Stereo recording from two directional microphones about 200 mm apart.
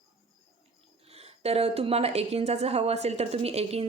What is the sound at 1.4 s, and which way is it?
A woman's voice, 30° right (ahead or behind).